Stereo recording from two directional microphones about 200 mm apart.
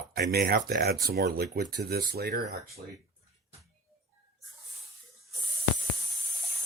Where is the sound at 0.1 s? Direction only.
50° right (ahead or behind).